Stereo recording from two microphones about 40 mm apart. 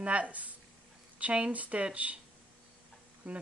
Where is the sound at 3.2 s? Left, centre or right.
Right.